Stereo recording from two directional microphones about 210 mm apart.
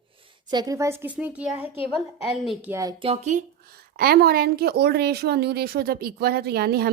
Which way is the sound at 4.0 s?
45° right (ahead or behind).